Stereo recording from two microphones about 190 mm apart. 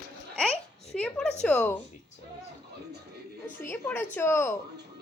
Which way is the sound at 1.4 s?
10° left (ahead or behind).